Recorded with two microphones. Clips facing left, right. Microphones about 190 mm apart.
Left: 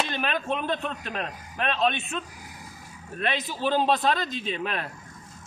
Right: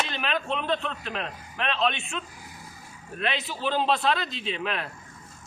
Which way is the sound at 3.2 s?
45° left (ahead or behind).